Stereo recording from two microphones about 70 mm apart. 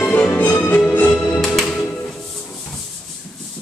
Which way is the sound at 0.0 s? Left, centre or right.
Centre.